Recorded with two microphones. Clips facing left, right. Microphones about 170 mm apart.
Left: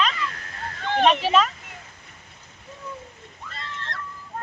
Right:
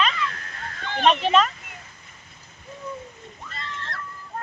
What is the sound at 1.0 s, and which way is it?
Speech, 5° left (ahead or behind).